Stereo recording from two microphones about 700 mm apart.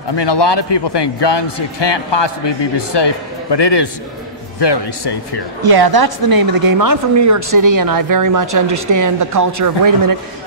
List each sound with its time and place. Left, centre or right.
0.1 s a man's voice: left
5.6 s a woman's voice: right